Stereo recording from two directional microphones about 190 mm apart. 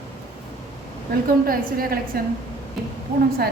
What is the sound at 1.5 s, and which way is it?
Speech, 50° right (ahead or behind).